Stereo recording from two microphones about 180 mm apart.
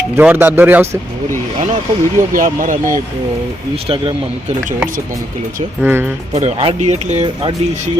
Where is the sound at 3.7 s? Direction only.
30° right (ahead or behind).